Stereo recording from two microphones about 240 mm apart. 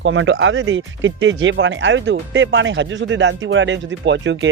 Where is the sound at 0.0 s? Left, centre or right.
Right.